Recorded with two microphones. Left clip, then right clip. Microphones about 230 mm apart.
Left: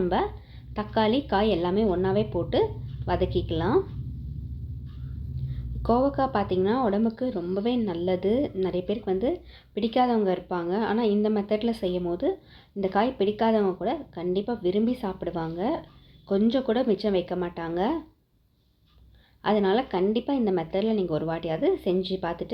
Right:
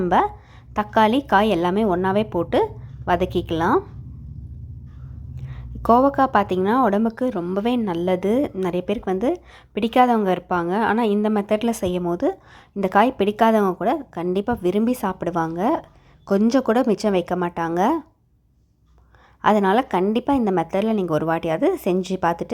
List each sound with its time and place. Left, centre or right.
0.0 s a woman's voice: right
5.5 s a woman's voice: right
19.4 s a woman's voice: right